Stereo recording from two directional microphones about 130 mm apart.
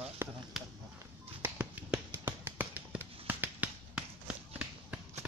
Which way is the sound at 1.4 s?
10° right (ahead or behind).